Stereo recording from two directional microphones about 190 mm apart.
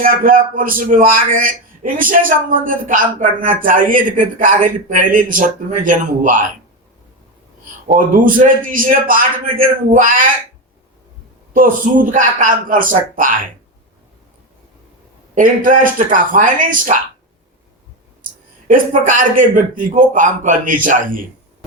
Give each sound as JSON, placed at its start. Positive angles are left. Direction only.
{"t": 0.0, "sound": "a man's voice", "side_deg": -45}
{"t": 7.9, "sound": "a man's voice", "side_deg": -45}
{"t": 11.5, "sound": "a man's voice", "side_deg": -45}
{"t": 15.4, "sound": "a man's voice", "side_deg": -45}
{"t": 18.7, "sound": "a man's voice", "side_deg": -45}